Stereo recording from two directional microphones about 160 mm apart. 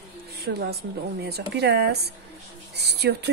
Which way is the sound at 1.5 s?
90° right.